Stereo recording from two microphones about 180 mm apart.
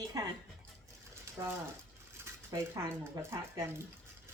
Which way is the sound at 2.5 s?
20° right (ahead or behind).